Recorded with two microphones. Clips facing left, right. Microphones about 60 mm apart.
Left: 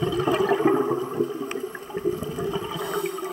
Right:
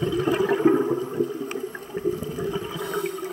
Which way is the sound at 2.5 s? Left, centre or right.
Right.